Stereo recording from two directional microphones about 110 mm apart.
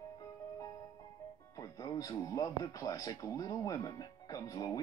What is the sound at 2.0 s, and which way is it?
Speech, 35° left (ahead or behind).